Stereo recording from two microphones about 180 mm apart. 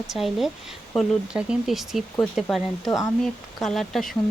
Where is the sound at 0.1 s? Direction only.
Centre (ahead or behind).